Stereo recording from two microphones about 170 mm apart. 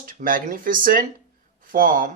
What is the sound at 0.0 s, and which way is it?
Speech, 50° right (ahead or behind).